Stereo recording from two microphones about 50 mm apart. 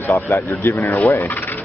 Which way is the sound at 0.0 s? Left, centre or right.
Left.